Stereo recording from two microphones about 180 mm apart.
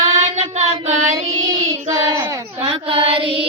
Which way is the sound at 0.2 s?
40° right (ahead or behind).